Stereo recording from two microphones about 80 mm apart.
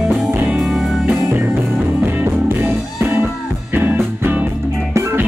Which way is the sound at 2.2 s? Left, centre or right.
Right.